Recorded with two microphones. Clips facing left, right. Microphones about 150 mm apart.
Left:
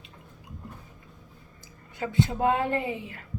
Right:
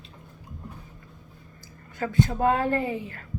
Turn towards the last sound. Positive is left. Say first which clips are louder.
# right 2 dB
turn(degrees=20)  # may be behind; listen again after turning